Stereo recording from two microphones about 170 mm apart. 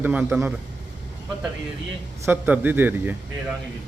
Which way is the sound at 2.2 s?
10° right (ahead or behind).